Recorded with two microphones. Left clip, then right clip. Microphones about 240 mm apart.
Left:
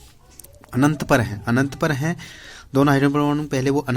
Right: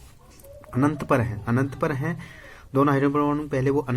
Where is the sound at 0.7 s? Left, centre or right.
Left.